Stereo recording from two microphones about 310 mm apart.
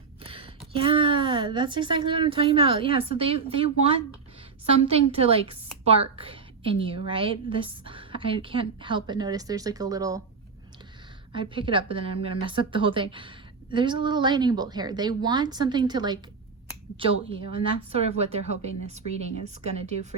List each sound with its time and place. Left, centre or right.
0.2 s a woman's voice: centre
11.3 s a woman's voice: centre